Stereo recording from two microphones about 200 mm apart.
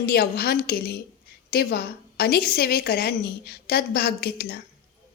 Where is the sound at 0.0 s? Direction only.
50° left (ahead or behind).